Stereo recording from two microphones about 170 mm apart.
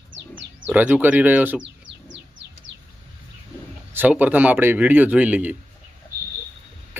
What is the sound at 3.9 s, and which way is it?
Speech, 10° right (ahead or behind).